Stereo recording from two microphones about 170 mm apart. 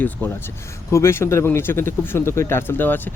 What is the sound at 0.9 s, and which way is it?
Speech, 15° left (ahead or behind).